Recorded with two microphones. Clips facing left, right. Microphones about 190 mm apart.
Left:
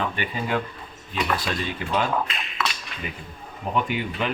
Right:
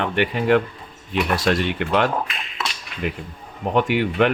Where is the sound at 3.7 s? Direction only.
70° right (ahead or behind).